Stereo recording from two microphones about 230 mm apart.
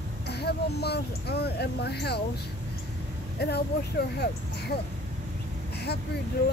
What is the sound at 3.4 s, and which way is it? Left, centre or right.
Speech, left.